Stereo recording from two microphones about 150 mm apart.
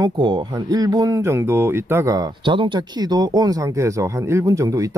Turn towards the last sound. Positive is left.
turn(degrees=-20)  # may be behind; listen again after turning